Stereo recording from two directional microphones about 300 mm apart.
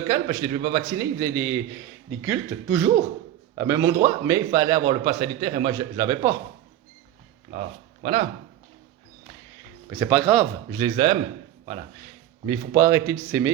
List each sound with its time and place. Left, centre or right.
0.1 s a man's voice: centre
8.0 s speech: centre
9.9 s a man's voice: centre
12.5 s a man's voice: centre